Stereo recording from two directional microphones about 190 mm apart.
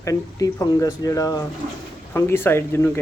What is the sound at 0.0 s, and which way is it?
Speech, 15° left (ahead or behind).